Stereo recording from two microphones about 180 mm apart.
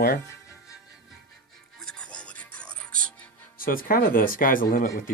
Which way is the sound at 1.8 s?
5° left (ahead or behind).